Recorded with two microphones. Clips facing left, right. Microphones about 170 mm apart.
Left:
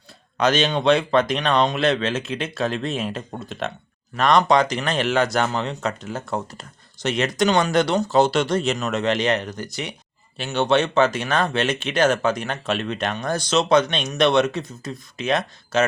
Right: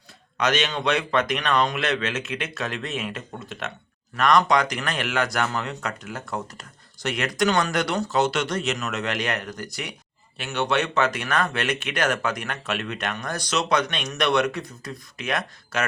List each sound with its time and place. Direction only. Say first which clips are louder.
0.3 s speech: left 4 dB; 30° left (ahead or behind)